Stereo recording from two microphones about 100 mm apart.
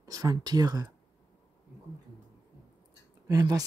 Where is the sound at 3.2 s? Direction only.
40° right (ahead or behind).